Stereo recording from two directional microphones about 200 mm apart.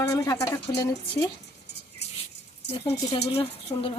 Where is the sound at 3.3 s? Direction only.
30° left (ahead or behind).